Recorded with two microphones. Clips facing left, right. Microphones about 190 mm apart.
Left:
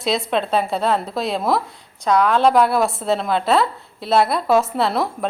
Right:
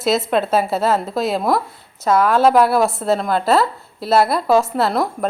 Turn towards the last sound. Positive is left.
turn(degrees=0)  # may be behind; listen again after turning